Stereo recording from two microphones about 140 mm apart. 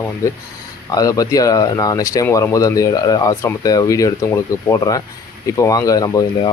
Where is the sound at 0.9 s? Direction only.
25° left (ahead or behind).